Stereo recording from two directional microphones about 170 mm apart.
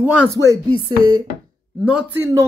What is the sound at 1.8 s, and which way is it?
Speech, 10° right (ahead or behind).